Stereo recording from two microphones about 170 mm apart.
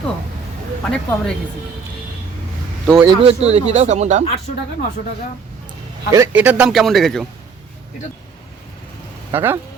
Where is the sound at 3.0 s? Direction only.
25° right (ahead or behind).